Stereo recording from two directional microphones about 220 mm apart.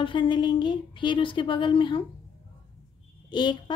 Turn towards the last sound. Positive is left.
turn(degrees=20)  # may be behind; listen again after turning